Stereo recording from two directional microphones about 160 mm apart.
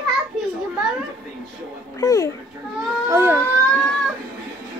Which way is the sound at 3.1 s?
15° right (ahead or behind).